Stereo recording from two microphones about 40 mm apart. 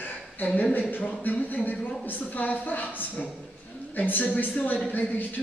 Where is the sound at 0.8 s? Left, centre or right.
Left.